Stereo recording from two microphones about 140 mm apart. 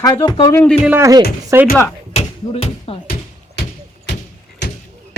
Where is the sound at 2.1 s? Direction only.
45° left (ahead or behind).